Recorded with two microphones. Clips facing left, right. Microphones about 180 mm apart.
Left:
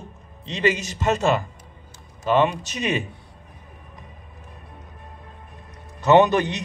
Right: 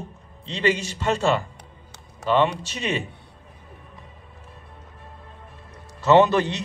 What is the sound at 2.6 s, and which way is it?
Speech, 20° left (ahead or behind).